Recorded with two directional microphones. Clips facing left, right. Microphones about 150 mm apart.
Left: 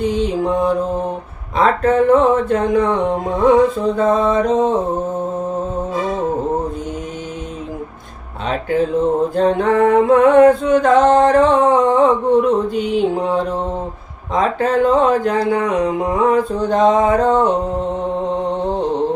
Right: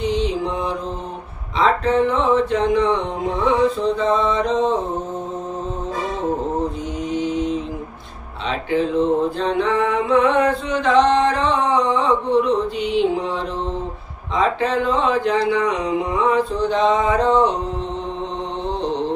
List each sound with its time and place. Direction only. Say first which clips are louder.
0.0 s mantra: left 3 dB; 45° left (ahead or behind)
1.5 s speech: left 3 dB; 50° left (ahead or behind)
9.3 s speech: left 5 dB; 45° left (ahead or behind)